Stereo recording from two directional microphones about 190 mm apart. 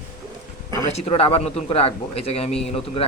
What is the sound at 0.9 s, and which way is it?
Speech, 30° left (ahead or behind).